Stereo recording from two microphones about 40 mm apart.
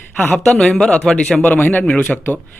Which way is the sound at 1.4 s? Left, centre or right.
Left.